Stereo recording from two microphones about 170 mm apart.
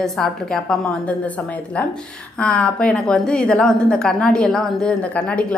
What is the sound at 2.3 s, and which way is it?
Speech, 5° left (ahead or behind).